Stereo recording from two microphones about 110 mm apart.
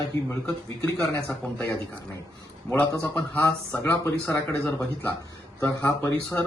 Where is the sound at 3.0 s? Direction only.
20° left (ahead or behind).